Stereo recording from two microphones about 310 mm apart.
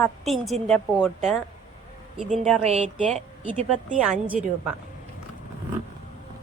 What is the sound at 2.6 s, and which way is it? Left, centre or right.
Speech, right.